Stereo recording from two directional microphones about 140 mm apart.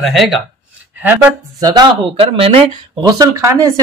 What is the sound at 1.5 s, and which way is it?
Speech, 25° right (ahead or behind).